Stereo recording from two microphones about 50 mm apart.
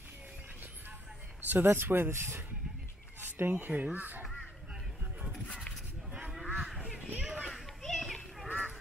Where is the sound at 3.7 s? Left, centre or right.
Right.